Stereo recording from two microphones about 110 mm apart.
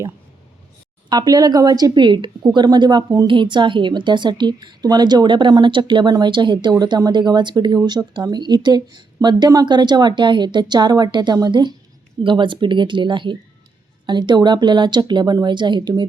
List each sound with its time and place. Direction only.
1.1 s a woman's voice: 35° right (ahead or behind)